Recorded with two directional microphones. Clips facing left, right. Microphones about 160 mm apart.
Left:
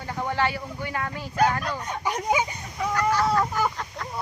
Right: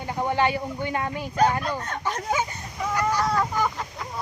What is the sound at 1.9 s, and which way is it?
Speech, 10° left (ahead or behind).